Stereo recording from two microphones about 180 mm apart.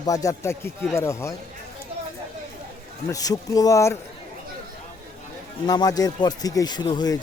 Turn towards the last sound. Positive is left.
turn(degrees=20)  # may be behind; listen again after turning